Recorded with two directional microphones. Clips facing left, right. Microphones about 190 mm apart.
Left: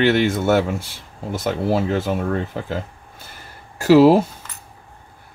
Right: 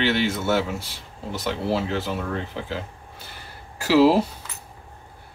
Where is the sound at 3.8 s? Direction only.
45° left (ahead or behind).